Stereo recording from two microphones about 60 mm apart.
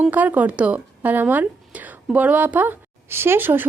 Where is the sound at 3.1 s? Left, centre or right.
Right.